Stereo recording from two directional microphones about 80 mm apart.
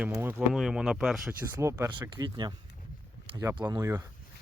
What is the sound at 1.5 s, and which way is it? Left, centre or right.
Speech, right.